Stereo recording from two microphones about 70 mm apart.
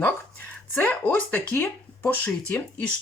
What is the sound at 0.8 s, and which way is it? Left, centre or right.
Speech, left.